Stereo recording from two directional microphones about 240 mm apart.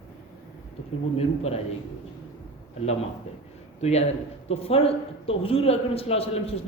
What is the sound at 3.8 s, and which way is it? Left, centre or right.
Speech, left.